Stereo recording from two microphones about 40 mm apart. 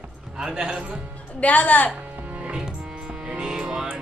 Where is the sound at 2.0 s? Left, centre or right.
Right.